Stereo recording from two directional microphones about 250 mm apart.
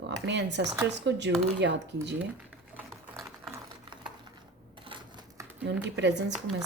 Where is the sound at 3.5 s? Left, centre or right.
Centre.